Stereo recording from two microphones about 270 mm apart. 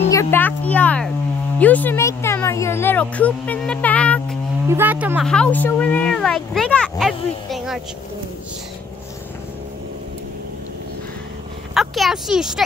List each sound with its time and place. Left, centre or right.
0.1 s a child's voice: centre
4.6 s speech: centre
11.7 s speech: centre